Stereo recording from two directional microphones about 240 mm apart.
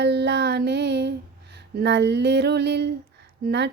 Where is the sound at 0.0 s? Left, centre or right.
Right.